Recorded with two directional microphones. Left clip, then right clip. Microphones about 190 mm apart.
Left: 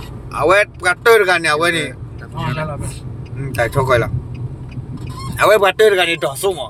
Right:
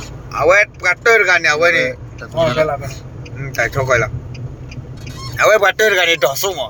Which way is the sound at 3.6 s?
30° left (ahead or behind).